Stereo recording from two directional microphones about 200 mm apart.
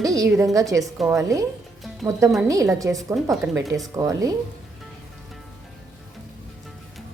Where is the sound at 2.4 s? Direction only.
15° right (ahead or behind).